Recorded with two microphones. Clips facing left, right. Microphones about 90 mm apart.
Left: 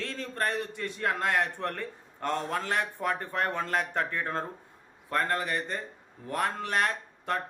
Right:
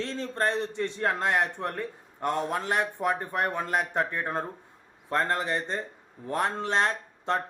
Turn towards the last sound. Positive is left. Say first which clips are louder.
# right 3 dB
turn(degrees=-25)  # may be behind; listen again after turning